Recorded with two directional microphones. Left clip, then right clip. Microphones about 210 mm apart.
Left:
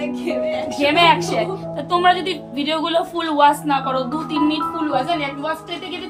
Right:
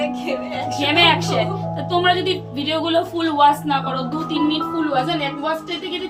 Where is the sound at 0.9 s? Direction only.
15° left (ahead or behind).